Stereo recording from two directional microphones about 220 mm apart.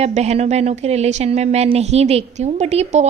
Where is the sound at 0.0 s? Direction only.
30° right (ahead or behind).